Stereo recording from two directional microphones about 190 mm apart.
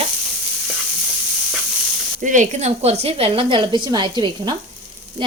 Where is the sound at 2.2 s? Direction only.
40° right (ahead or behind).